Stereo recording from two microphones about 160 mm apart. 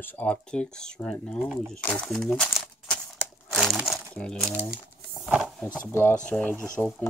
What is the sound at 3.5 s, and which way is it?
Crumpling, centre (ahead or behind).